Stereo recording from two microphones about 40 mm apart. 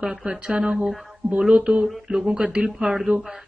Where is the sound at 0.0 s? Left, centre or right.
Centre.